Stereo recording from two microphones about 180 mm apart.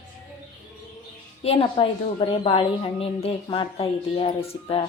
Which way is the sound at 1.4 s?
30° left (ahead or behind).